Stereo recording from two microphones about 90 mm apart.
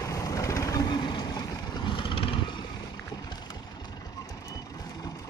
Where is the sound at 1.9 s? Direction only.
70° left (ahead or behind).